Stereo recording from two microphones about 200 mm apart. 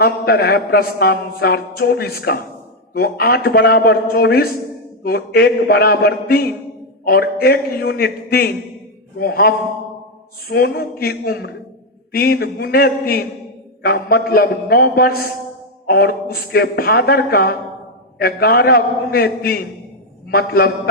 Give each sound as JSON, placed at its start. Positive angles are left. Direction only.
{"t": 0.0, "sound": "a man's voice", "side_deg": 50}
{"t": 10.5, "sound": "a man's voice", "side_deg": 50}